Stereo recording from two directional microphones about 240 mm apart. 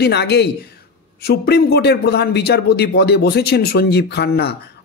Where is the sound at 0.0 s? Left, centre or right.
Left.